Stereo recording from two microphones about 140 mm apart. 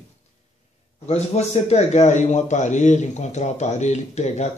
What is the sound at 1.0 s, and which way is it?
A man's voice, 50° left (ahead or behind).